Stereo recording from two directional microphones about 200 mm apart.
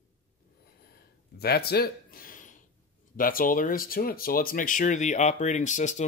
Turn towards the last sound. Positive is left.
turn(degrees=40)  # may be behind; listen again after turning